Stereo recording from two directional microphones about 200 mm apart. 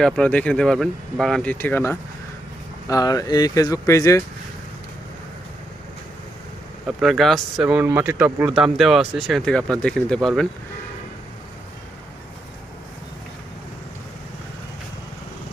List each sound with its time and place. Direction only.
0.0 s speech: 5° left (ahead or behind)
6.8 s speech: centre (ahead or behind)